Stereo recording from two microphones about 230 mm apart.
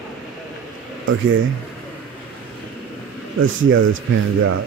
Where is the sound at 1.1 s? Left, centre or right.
Right.